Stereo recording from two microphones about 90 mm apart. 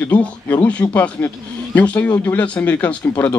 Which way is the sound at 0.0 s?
15° left (ahead or behind).